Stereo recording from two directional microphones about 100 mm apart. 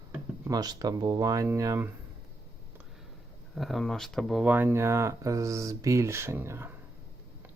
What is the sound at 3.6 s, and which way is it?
Speech, centre (ahead or behind).